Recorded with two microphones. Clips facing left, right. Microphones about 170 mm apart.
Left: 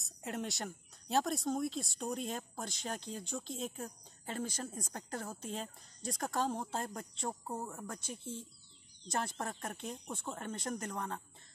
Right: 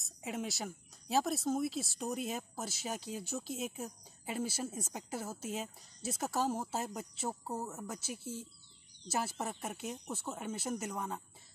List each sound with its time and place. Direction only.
0.0 s speech: centre (ahead or behind)